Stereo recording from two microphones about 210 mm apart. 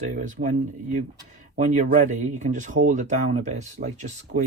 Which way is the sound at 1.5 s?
35° right (ahead or behind).